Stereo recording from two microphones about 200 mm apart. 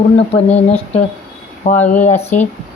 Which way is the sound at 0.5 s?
35° left (ahead or behind).